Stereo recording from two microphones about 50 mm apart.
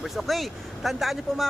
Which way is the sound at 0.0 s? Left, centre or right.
Centre.